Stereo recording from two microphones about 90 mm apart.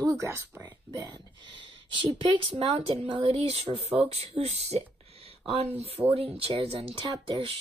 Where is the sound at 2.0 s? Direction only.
85° right.